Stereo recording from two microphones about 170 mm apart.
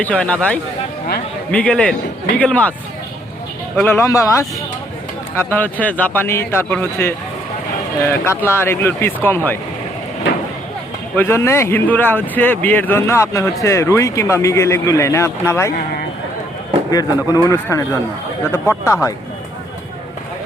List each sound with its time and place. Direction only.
0.0 s speech: 10° left (ahead or behind)
3.8 s speech: 15° left (ahead or behind)
11.2 s speech: 15° left (ahead or behind)
16.9 s speech: 20° left (ahead or behind)